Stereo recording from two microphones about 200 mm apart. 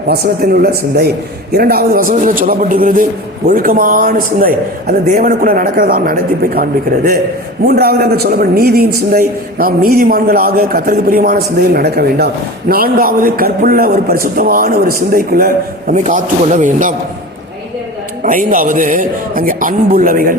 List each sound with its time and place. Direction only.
0.1 s a man's voice: 50° right (ahead or behind)
18.2 s a man's voice: 45° right (ahead or behind)